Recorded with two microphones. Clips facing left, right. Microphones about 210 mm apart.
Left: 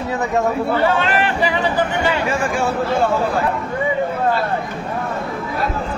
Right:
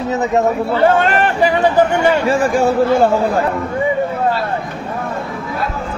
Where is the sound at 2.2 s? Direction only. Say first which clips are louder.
Right 6 dB; 35° right (ahead or behind).